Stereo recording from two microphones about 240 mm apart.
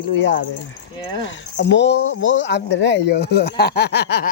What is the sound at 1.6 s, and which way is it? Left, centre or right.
Speech, left.